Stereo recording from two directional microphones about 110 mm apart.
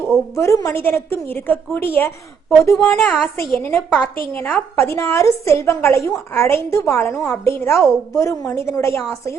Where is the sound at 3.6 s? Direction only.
20° left (ahead or behind).